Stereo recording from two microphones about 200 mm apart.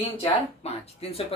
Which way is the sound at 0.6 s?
30° left (ahead or behind).